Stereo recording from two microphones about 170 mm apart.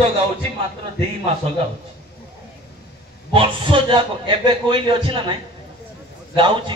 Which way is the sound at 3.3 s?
30° right (ahead or behind).